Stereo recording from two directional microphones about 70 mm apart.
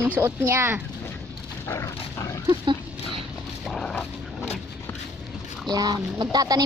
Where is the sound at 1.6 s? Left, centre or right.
Left.